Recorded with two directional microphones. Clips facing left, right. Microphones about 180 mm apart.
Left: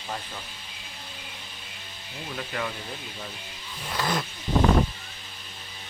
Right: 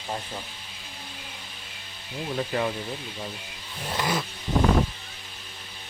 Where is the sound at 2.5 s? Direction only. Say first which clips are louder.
Right 5 dB; 35° right (ahead or behind).